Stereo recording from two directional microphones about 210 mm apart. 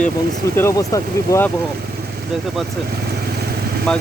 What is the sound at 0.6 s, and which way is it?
Speech, 15° left (ahead or behind).